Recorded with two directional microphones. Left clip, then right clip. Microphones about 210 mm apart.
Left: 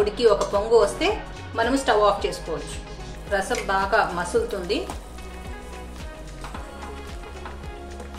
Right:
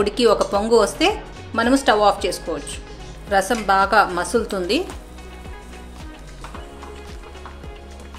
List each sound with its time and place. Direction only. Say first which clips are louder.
0.0 s speech: right 2 dB; 50° right (ahead or behind)